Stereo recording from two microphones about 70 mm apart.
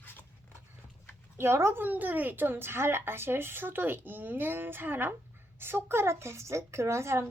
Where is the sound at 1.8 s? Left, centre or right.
Right.